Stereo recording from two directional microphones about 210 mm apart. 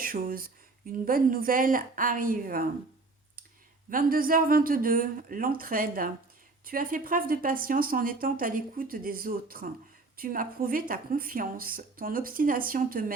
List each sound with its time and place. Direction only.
0.0 s a woman's voice: 45° right (ahead or behind)
3.8 s speech: 40° right (ahead or behind)